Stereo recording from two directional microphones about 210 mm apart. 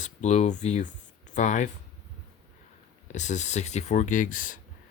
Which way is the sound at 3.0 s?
35° left (ahead or behind).